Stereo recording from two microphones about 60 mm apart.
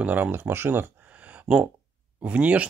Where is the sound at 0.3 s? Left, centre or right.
Right.